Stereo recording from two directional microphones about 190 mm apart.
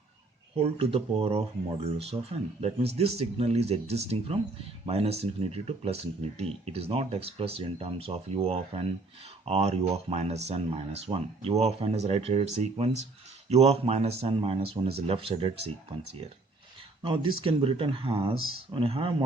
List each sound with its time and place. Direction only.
0.5 s speech: 30° right (ahead or behind)
17.0 s speech: 25° right (ahead or behind)